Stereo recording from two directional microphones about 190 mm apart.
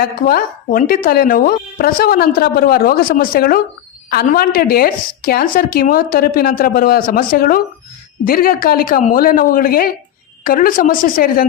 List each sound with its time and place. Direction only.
0.0 s a woman's voice: 50° left (ahead or behind)